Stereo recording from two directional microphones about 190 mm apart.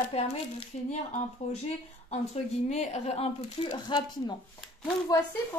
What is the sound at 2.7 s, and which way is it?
Speech, 35° left (ahead or behind).